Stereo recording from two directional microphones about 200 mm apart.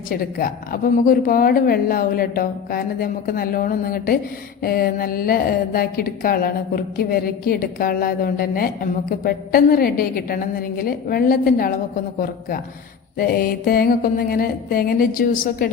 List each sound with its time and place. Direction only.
0.1 s a woman's voice: 45° left (ahead or behind)